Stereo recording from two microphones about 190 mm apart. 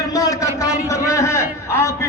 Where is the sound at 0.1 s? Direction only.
20° left (ahead or behind).